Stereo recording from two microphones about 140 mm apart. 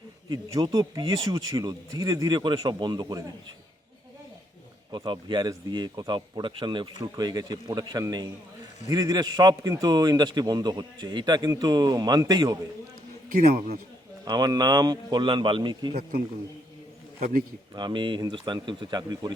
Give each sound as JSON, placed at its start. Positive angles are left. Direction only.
{"t": 0.3, "sound": "a man's voice", "side_deg": -30}
{"t": 4.9, "sound": "a man's voice", "side_deg": -30}
{"t": 14.3, "sound": "a man's voice", "side_deg": -30}
{"t": 17.7, "sound": "a man's voice", "side_deg": -35}